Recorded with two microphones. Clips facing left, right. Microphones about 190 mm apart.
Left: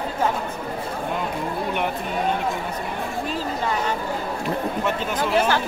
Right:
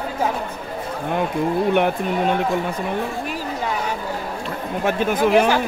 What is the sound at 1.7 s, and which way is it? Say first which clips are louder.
Speech: right 6 dB; 60° right (ahead or behind).